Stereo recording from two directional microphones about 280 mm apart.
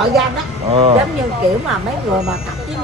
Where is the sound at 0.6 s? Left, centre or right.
Right.